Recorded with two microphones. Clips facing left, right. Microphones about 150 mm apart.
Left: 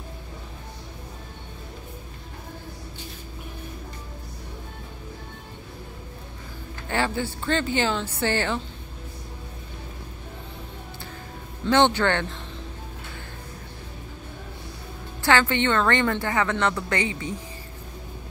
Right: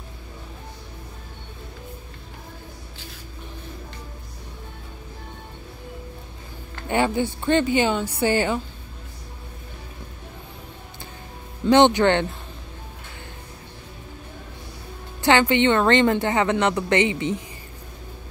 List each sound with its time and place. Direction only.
6.9 s a woman's voice: 20° right (ahead or behind)
11.6 s a woman's voice: 15° right (ahead or behind)
15.2 s a woman's voice: 15° right (ahead or behind)